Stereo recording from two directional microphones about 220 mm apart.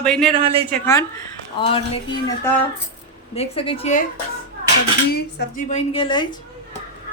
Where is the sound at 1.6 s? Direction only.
25° left (ahead or behind).